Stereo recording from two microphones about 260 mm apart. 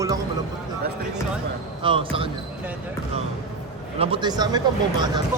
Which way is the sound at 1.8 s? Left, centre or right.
Centre.